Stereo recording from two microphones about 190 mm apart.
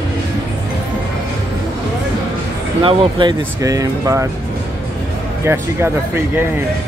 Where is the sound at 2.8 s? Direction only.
30° right (ahead or behind).